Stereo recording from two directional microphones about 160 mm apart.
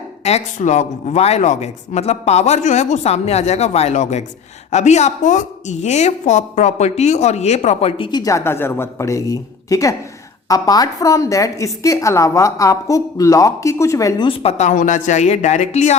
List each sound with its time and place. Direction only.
0.3 s a woman's voice: 45° left (ahead or behind); by 14.3 s 20° left (ahead or behind)
14.3 s a woman's voice: 35° left (ahead or behind)